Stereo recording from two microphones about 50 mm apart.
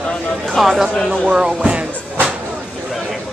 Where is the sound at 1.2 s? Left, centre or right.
Centre.